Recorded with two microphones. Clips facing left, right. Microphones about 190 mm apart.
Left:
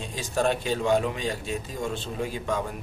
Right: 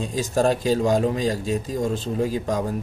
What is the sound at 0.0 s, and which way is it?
Speech, 40° right (ahead or behind).